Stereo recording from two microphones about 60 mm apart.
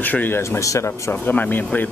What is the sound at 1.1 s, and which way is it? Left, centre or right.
Speech, left.